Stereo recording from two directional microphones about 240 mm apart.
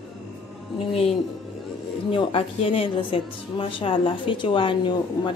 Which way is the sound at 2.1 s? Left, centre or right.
Left.